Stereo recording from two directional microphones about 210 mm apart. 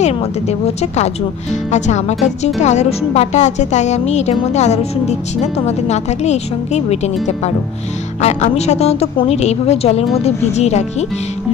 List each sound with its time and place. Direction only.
0.0 s a woman's voice: 30° left (ahead or behind)